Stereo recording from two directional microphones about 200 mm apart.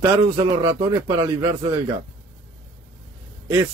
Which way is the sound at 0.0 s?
20° right (ahead or behind).